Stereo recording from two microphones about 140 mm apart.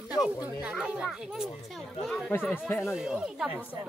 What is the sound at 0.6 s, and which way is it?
Speech, 5° right (ahead or behind).